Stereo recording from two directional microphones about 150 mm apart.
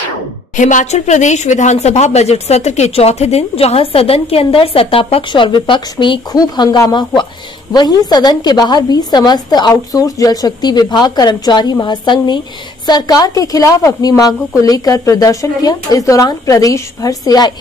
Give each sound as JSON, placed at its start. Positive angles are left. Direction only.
{"t": 0.6, "sound": "a woman's voice", "side_deg": 55}